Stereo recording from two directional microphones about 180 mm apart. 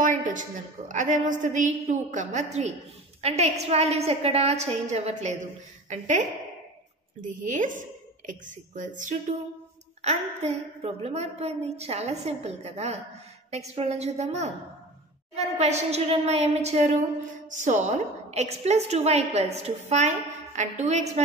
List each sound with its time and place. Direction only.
0.0 s a woman's voice: 45° right (ahead or behind)